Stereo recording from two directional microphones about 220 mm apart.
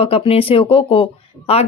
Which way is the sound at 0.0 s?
25° left (ahead or behind).